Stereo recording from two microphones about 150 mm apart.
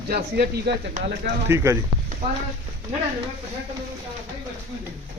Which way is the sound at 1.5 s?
20° right (ahead or behind).